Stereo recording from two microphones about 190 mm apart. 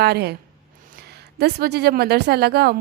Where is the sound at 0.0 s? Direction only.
60° right (ahead or behind).